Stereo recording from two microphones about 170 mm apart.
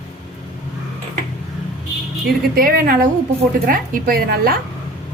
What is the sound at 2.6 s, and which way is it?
A woman's voice, 55° right (ahead or behind).